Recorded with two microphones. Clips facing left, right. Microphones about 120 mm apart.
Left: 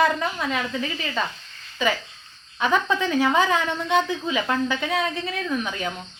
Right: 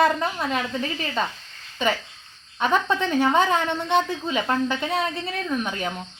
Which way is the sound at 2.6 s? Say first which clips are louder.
Even; centre (ahead or behind).